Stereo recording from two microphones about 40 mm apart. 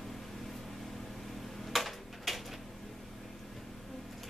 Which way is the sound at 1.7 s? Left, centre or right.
Centre.